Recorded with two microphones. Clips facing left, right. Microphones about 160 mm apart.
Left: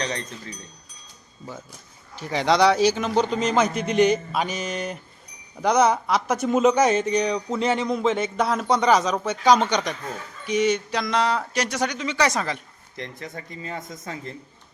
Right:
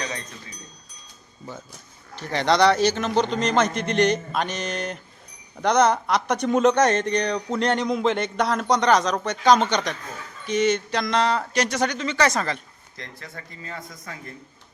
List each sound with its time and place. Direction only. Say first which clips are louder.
2.1 s a man's voice: even; 5° left (ahead or behind); by 14.3 s 25° left (ahead or behind)